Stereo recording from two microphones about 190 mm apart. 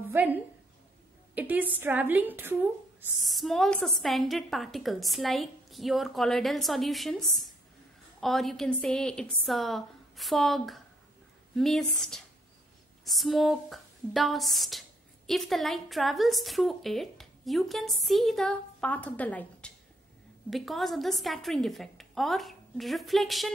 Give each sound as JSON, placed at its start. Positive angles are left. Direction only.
{"t": 0.1, "sound": "a woman's voice", "side_deg": -10}